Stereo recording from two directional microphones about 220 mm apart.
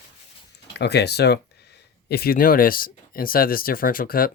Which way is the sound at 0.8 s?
50° left (ahead or behind).